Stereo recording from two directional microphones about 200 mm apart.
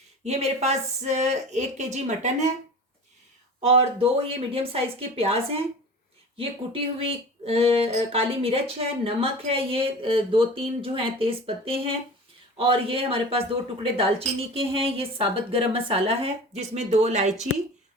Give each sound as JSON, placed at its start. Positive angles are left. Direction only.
{"t": 0.3, "sound": "speech", "side_deg": -35}
{"t": 3.6, "sound": "speech", "side_deg": -30}